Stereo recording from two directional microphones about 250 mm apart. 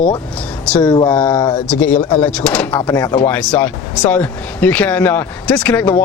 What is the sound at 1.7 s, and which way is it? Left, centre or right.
Speech, centre.